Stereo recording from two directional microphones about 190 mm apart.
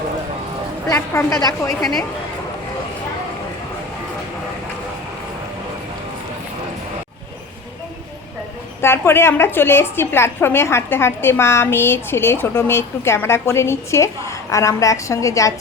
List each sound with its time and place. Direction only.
0.9 s a woman's voice: 15° left (ahead or behind)
8.8 s a woman's voice: 10° left (ahead or behind)